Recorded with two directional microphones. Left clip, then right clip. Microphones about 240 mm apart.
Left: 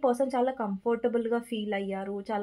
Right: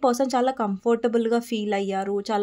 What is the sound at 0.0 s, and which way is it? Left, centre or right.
Speech, right.